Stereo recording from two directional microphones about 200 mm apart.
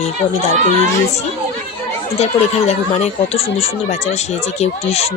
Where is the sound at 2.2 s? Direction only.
35° left (ahead or behind).